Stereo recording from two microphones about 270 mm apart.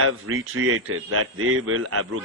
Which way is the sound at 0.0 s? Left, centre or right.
Right.